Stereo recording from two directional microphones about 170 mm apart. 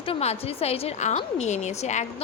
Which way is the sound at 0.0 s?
35° left (ahead or behind).